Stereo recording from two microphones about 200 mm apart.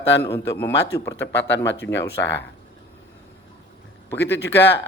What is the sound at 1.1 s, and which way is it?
Speech, 10° left (ahead or behind).